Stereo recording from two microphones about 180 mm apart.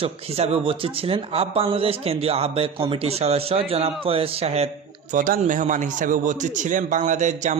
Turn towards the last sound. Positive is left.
turn(degrees=-40)  # may be behind; listen again after turning